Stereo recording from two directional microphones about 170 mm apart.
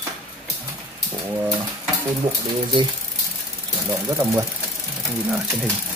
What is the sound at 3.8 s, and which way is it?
Speech, 20° right (ahead or behind).